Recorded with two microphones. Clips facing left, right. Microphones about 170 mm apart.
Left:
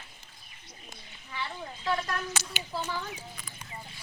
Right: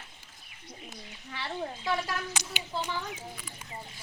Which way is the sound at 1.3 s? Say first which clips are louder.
Right 3 dB; 60° right (ahead or behind).